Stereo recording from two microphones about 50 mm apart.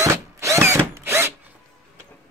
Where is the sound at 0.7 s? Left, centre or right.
Right.